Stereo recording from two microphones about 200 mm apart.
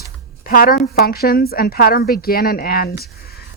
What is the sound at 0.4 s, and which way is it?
A woman's voice, 45° left (ahead or behind).